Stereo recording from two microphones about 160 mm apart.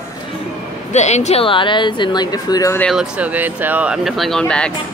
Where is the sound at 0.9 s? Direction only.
45° left (ahead or behind); by 2.7 s 25° left (ahead or behind).